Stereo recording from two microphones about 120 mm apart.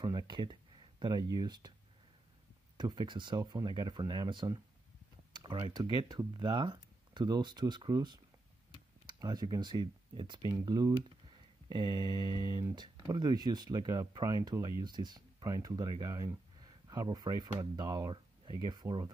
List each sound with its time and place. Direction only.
0.0 s speech: 35° right (ahead or behind)
2.8 s speech: 40° right (ahead or behind)
10.5 s speech: 30° right (ahead or behind)